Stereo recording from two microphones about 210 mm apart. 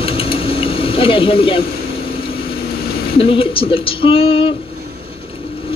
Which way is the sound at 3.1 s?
25° left (ahead or behind).